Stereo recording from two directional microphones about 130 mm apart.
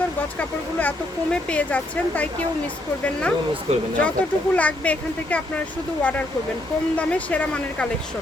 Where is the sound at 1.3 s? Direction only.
10° left (ahead or behind).